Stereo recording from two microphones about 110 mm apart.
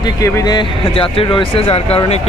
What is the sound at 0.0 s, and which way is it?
Speech, 35° left (ahead or behind).